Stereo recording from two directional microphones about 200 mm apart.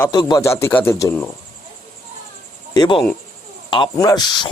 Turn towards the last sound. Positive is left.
turn(degrees=20)  # may be behind; listen again after turning